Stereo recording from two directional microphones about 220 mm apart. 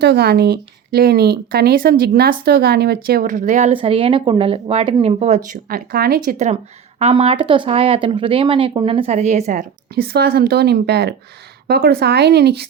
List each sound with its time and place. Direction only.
0.0 s speech: 50° right (ahead or behind)